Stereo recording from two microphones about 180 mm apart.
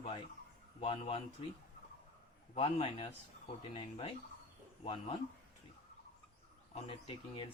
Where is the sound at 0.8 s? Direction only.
30° left (ahead or behind).